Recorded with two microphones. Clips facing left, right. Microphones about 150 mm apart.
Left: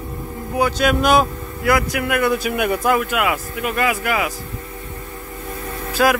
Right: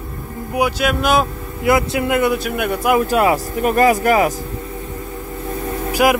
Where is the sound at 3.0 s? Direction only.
35° right (ahead or behind).